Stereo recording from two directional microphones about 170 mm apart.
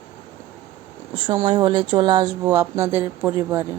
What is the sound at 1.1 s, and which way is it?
Speech, 30° right (ahead or behind).